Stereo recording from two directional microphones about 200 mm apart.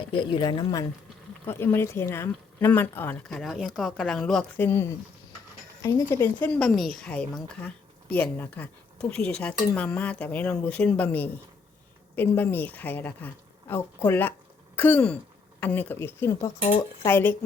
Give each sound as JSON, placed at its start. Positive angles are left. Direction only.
{"t": 0.1, "sound": "a woman's voice", "side_deg": 25}